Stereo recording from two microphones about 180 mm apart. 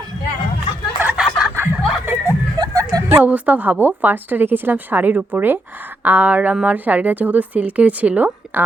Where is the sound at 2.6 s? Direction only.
25° right (ahead or behind).